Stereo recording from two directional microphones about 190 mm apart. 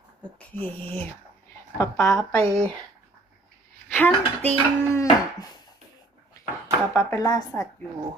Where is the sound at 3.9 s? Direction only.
10° left (ahead or behind).